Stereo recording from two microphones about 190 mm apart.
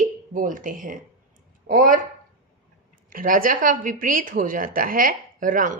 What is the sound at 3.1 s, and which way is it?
Speech, 45° right (ahead or behind).